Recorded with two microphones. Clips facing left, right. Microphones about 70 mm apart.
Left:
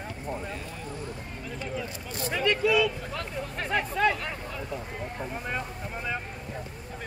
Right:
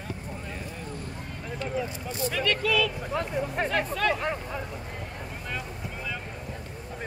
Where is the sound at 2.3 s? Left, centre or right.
Centre.